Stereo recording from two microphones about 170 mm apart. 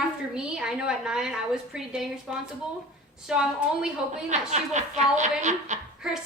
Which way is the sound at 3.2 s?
5° right (ahead or behind).